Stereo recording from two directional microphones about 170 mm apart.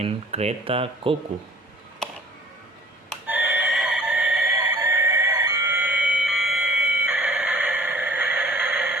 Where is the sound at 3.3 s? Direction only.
10° right (ahead or behind).